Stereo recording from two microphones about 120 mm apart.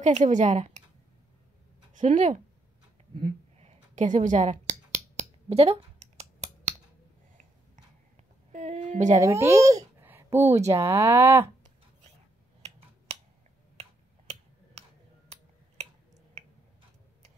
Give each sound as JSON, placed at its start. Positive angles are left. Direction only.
{"t": 0.0, "sound": "speech", "side_deg": -85}
{"t": 2.0, "sound": "speech", "side_deg": -90}
{"t": 3.5, "sound": "a sound", "side_deg": -75}
{"t": 8.5, "sound": "a woman's voice", "side_deg": -85}
{"t": 9.2, "sound": "speech", "side_deg": -25}
{"t": 10.0, "sound": "a sound", "side_deg": -20}
{"t": 10.7, "sound": "speech", "side_deg": -20}
{"t": 14.7, "sound": "tick-tock", "side_deg": -65}